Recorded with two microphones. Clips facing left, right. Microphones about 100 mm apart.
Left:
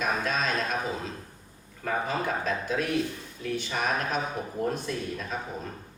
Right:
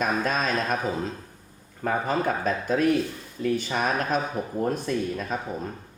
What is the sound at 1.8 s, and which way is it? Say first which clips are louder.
A man's voice: right 4 dB; 45° right (ahead or behind).